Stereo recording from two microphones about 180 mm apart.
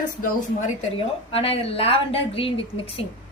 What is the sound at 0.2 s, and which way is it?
A woman's voice, 40° left (ahead or behind).